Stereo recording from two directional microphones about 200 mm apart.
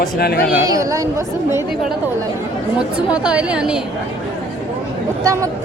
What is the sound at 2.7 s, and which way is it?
Speech, 5° right (ahead or behind).